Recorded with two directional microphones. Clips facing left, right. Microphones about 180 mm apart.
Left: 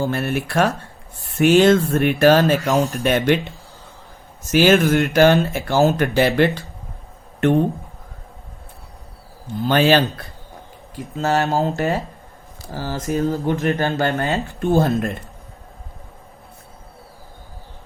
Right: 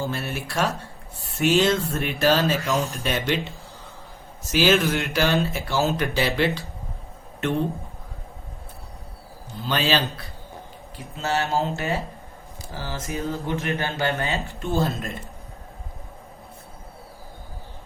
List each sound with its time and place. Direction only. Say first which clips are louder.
0.0 s speech: left 7 dB; 55° left (ahead or behind)
4.5 s speech: left 6 dB; 50° left (ahead or behind)
9.6 s speech: left 8 dB; 50° left (ahead or behind)
11.2 s speech: left 5 dB; 40° left (ahead or behind)
14.6 s speech: left 8 dB; 55° left (ahead or behind)